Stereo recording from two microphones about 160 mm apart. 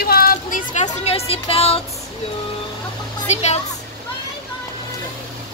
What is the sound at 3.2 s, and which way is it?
Speech, 45° left (ahead or behind).